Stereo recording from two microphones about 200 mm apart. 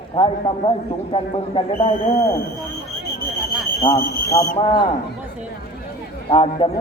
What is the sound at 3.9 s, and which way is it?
Speech, 25° left (ahead or behind).